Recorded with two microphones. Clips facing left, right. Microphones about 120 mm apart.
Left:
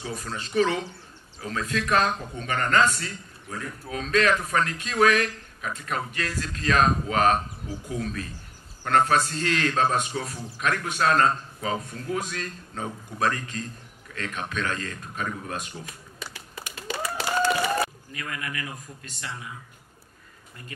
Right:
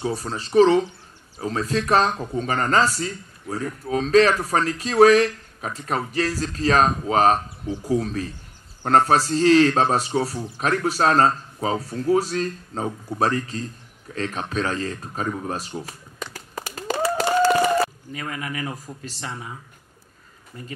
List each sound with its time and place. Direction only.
0.0 s speech: 35° right (ahead or behind)
16.3 s a sound: 40° right (ahead or behind)
18.2 s speech: 40° right (ahead or behind)